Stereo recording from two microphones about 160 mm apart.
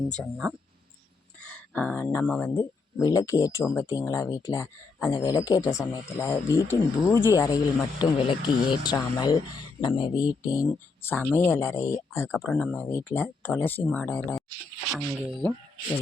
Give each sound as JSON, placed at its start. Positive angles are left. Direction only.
{"t": 1.5, "sound": "speech", "side_deg": 10}
{"t": 11.0, "sound": "speech", "side_deg": 10}
{"t": 12.4, "sound": "speech", "side_deg": 5}